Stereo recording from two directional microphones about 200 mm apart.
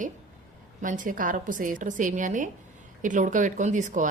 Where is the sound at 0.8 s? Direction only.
40° right (ahead or behind).